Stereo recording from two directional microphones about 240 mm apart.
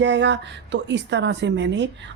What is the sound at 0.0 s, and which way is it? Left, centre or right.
Speech, right.